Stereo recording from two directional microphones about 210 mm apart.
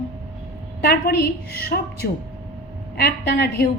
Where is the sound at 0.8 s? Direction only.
45° left (ahead or behind).